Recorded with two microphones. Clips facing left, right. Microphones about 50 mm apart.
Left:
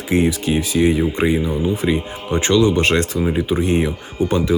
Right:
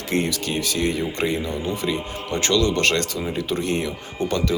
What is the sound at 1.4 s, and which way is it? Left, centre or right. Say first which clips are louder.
Speech: left 6 dB; centre.